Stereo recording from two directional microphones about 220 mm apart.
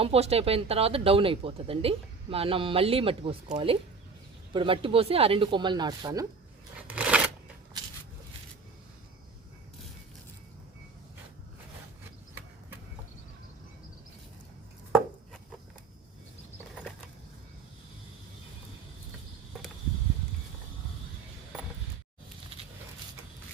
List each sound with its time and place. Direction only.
0.0 s speech: 30° right (ahead or behind)
6.8 s shuffling cards: 5° right (ahead or behind)